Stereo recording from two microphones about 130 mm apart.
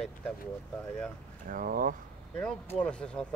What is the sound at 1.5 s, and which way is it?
Speech, 90° right.